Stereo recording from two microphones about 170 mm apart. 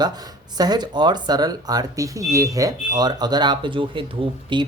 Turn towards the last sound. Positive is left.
turn(degrees=-30)  # may be behind; listen again after turning